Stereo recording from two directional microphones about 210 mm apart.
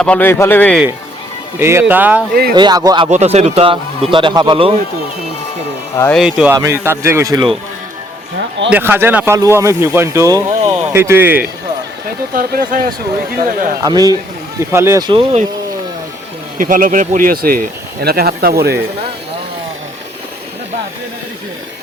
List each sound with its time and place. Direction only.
0.0 s speech: 5° left (ahead or behind)
1.5 s speech: 10° right (ahead or behind)
2.3 s speech: 45° right (ahead or behind)
2.6 s a man's voice: 20° right (ahead or behind)
3.1 s a man's voice: 30° right (ahead or behind)
6.1 s speech: 5° right (ahead or behind)
8.7 s speech: 10° right (ahead or behind)
12.3 s speech: 40° right (ahead or behind)
13.8 s speech: 15° right (ahead or behind)
16.6 s speech: 40° right (ahead or behind)